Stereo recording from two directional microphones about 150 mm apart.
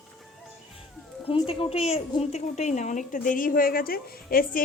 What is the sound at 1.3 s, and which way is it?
A woman's voice, 40° left (ahead or behind).